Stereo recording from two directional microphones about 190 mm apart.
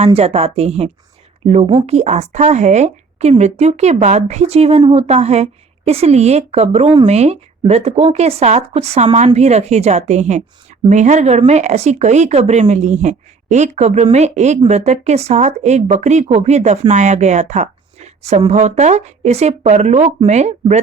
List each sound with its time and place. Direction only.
0.0 s a woman's voice: 35° right (ahead or behind)